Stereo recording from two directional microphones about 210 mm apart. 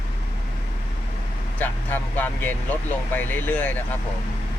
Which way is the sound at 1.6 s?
10° left (ahead or behind).